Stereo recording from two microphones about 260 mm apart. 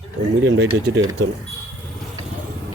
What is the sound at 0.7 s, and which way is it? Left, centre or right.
Speech, centre.